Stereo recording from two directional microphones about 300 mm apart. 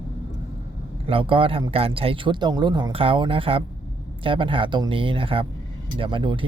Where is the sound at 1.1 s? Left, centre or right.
Centre.